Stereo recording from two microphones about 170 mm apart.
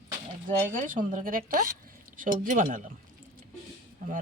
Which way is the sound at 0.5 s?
55° right (ahead or behind).